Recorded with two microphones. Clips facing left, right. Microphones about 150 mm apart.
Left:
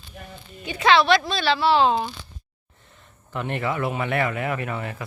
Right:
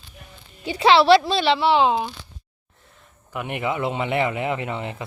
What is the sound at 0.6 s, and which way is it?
Speech, 30° right (ahead or behind).